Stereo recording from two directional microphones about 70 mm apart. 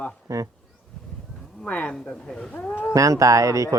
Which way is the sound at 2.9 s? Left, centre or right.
Right.